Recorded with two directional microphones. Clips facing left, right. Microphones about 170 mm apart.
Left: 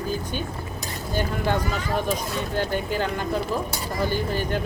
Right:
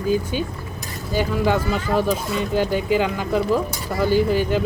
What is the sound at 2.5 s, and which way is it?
Speech, 10° right (ahead or behind).